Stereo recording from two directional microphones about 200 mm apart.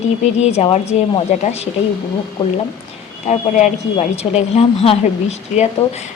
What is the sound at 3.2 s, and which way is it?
Speech, 35° left (ahead or behind).